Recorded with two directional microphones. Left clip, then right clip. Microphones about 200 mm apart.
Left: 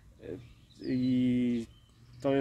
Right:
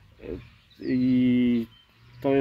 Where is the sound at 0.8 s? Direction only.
5° left (ahead or behind).